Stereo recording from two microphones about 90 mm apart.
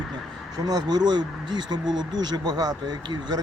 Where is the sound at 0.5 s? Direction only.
45° right (ahead or behind).